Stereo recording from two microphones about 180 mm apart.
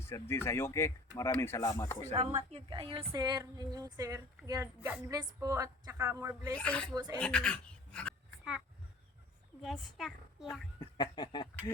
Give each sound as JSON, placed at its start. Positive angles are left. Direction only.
{"t": 0.0, "sound": "speech", "side_deg": 15}
{"t": 2.1, "sound": "speech", "side_deg": -30}
{"t": 6.6, "sound": "speech", "side_deg": 5}
{"t": 6.9, "sound": "speech", "side_deg": -20}
{"t": 7.2, "sound": "a sound", "side_deg": 5}
{"t": 9.6, "sound": "speech", "side_deg": 0}
{"t": 10.8, "sound": "speech", "side_deg": 25}